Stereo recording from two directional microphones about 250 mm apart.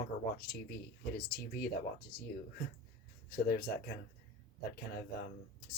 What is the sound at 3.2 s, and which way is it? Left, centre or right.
Speech, left.